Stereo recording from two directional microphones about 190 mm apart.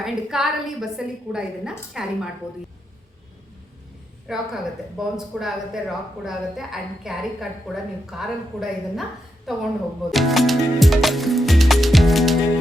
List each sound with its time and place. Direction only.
0.0 s a woman's voice: centre (ahead or behind)
4.3 s a woman's voice: centre (ahead or behind)
10.1 s music: centre (ahead or behind)